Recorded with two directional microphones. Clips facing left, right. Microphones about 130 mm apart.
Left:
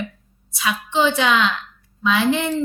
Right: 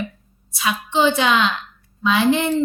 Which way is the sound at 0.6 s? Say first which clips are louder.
Right 1 dB; 25° right (ahead or behind).